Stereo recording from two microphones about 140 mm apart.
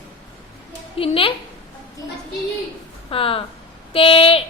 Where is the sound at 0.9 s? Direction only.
40° left (ahead or behind).